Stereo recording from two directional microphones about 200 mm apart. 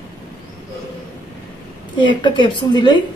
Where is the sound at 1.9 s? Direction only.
25° left (ahead or behind).